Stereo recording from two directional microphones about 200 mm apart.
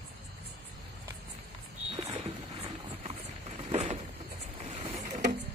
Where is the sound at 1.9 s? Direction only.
35° right (ahead or behind).